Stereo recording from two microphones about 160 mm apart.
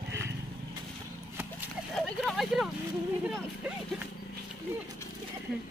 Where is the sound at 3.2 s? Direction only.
5° right (ahead or behind).